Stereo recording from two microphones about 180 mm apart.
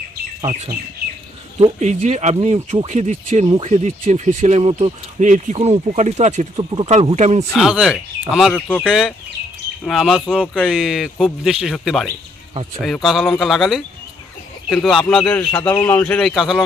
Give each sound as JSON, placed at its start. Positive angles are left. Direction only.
{"t": 1.0, "sound": "bird", "side_deg": -60}
{"t": 1.8, "sound": "speech", "side_deg": -40}
{"t": 7.5, "sound": "speech", "side_deg": 0}